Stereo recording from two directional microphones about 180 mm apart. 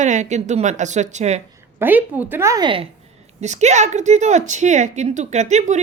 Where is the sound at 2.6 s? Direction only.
30° right (ahead or behind).